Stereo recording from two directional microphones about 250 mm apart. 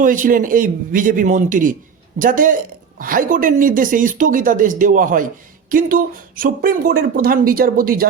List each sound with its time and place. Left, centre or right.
0.0 s speech: right